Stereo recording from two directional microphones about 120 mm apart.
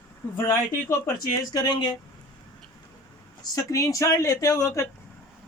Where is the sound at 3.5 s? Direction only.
25° left (ahead or behind).